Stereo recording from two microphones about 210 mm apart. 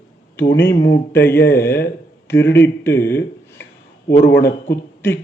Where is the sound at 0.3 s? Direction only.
10° left (ahead or behind).